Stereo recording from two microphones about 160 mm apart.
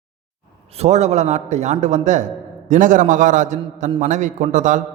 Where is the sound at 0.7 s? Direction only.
45° right (ahead or behind).